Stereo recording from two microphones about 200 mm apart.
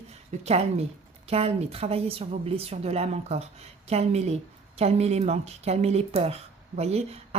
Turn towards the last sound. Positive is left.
turn(degrees=-30)  # may be behind; listen again after turning